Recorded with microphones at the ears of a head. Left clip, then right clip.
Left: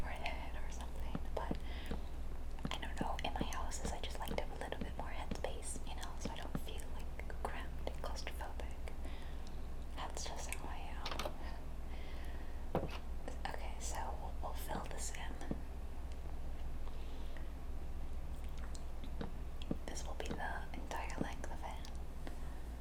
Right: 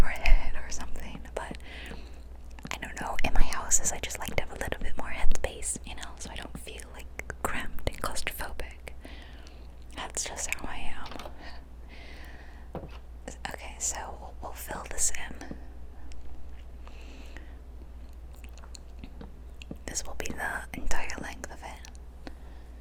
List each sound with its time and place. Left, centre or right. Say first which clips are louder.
0.0 s whispering: right 12 dB; right
13.2 s whispering: right 8 dB; right
19.5 s whispering: right 8 dB; right